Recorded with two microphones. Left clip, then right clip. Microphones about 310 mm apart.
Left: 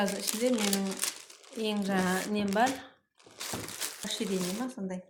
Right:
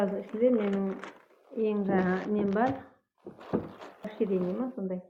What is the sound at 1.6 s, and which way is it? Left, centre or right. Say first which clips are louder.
Speech: right 3 dB; left.